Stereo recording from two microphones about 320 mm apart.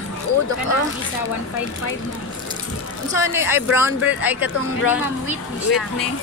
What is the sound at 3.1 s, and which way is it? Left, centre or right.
Speech, centre.